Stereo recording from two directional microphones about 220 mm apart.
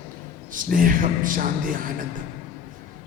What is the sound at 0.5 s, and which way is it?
Speech, 40° right (ahead or behind).